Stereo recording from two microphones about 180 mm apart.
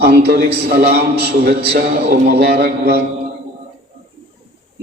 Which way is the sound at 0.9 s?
60° right (ahead or behind).